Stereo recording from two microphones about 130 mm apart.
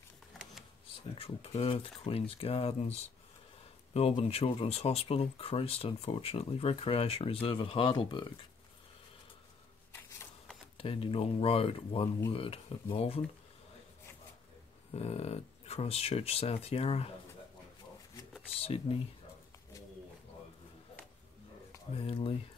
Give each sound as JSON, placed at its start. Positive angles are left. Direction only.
{"t": 1.1, "sound": "speech", "side_deg": 50}
{"t": 9.9, "sound": "a sound", "side_deg": 20}
{"t": 10.8, "sound": "speech", "side_deg": 45}
{"t": 14.9, "sound": "speech", "side_deg": 55}
{"t": 18.6, "sound": "speech", "side_deg": 50}
{"t": 21.9, "sound": "speech", "side_deg": 45}